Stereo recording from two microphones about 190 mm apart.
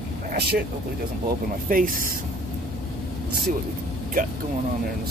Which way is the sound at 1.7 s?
50° right (ahead or behind).